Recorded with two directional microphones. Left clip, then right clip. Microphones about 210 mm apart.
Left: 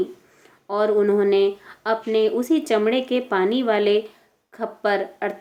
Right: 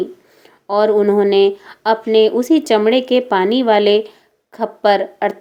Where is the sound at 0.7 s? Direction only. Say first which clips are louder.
Right 6 dB; 30° right (ahead or behind).